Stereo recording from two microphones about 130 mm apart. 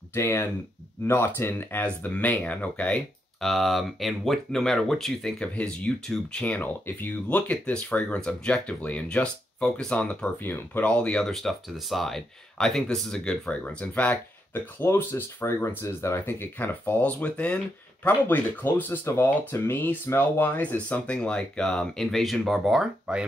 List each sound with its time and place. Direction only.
0.1 s speech: 20° left (ahead or behind); by 23.2 s 5° right (ahead or behind)